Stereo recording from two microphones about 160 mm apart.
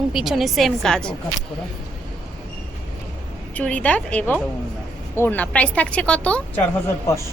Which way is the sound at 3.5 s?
10° left (ahead or behind).